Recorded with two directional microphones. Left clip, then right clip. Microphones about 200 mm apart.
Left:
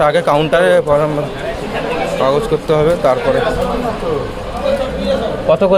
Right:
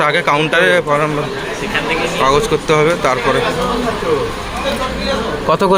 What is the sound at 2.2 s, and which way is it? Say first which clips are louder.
Speech: right 1 dB; 10° left (ahead or behind).